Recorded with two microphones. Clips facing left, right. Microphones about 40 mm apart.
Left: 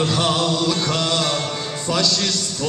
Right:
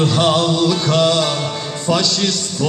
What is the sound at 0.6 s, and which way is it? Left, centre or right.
Music, centre.